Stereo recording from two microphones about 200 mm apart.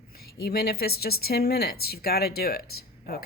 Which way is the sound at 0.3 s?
50° left (ahead or behind).